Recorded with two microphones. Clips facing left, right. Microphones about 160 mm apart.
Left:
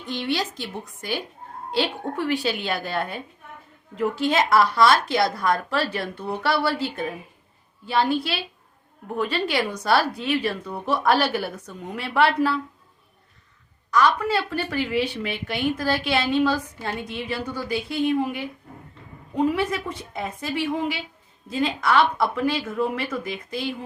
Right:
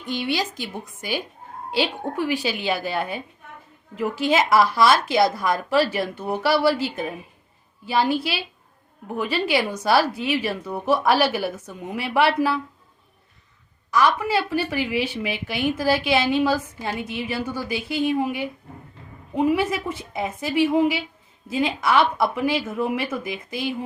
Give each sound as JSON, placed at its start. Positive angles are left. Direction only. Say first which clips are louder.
{"t": 0.1, "sound": "a woman's voice", "louder": "right 1 dB", "side_deg": -5}
{"t": 7.9, "sound": "a woman's voice", "louder": "right 1 dB", "side_deg": -10}
{"t": 13.9, "sound": "a woman's voice", "louder": "even", "side_deg": -5}